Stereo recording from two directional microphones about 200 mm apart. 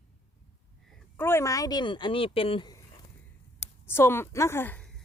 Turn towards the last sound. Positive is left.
turn(degrees=10)  # may be behind; listen again after turning